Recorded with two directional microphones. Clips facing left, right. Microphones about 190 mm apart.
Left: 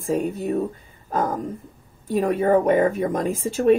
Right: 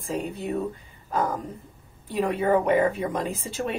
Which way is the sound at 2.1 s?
45° left (ahead or behind).